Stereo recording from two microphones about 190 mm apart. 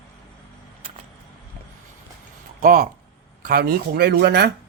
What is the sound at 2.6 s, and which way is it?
A man's voice, 50° right (ahead or behind).